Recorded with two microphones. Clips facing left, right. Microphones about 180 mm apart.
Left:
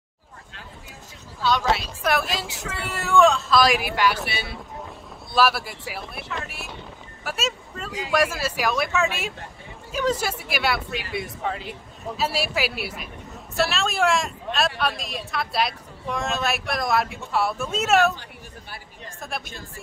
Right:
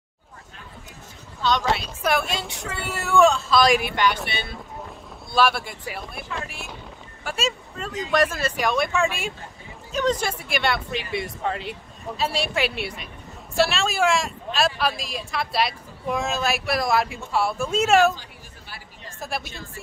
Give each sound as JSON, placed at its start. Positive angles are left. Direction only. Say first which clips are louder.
{"t": 1.4, "sound": "speech", "louder": "even", "side_deg": 5}
{"t": 19.1, "sound": "a woman's voice", "louder": "right 3 dB", "side_deg": 0}